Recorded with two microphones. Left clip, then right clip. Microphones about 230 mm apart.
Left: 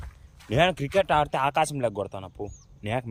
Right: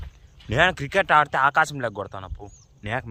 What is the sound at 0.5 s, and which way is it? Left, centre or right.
A man's voice, centre.